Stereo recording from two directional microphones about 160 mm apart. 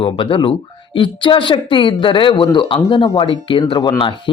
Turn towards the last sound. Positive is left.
turn(degrees=30)  # may be behind; listen again after turning